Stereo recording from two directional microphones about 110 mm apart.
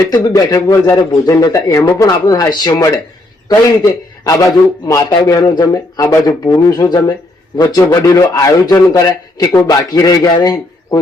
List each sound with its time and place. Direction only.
0.0 s speech: 30° left (ahead or behind)
4.2 s speech: 35° left (ahead or behind)